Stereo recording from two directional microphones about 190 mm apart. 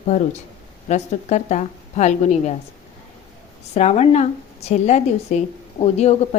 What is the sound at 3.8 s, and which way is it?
A woman's voice, 35° left (ahead or behind).